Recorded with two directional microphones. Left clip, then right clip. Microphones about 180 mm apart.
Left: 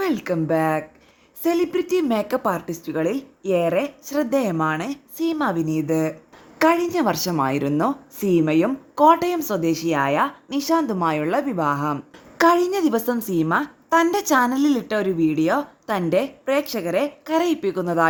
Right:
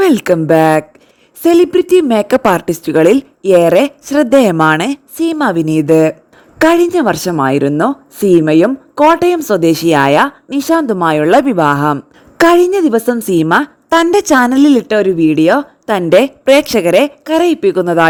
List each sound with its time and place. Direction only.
0.0 s a woman's voice: 55° right (ahead or behind)
10.2 s a woman's voice: 45° right (ahead or behind)